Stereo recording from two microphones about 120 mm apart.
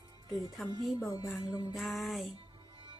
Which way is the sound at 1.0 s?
30° left (ahead or behind).